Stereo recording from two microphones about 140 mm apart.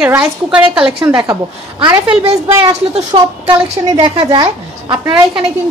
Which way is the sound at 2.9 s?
35° right (ahead or behind).